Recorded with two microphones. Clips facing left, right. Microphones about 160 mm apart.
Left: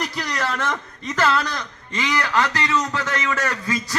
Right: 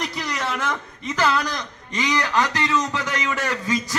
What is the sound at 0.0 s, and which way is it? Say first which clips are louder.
A man's voice: left 1 dB; 5° right (ahead or behind).